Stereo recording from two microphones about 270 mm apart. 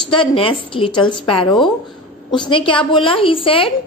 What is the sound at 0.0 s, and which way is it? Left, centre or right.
A woman's voice, centre.